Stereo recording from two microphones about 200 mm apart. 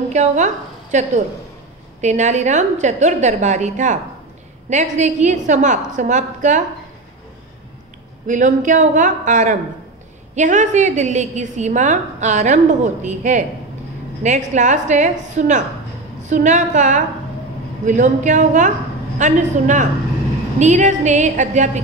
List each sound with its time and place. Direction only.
0.1 s a woman's voice: 35° right (ahead or behind)
8.3 s a woman's voice: 40° right (ahead or behind)